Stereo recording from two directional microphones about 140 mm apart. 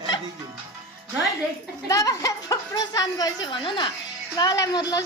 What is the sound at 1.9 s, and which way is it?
A woman's voice, 25° left (ahead or behind).